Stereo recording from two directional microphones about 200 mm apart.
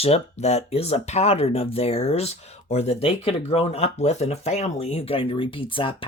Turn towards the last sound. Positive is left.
turn(degrees=25)  # may be behind; listen again after turning